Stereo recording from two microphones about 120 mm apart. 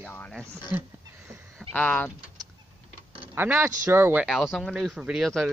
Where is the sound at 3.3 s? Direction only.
20° right (ahead or behind).